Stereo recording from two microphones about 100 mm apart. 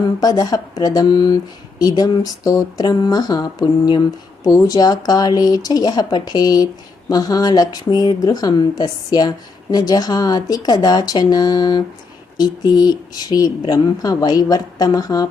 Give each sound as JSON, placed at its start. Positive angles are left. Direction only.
{"t": 0.2, "sound": "a woman's voice", "side_deg": 40}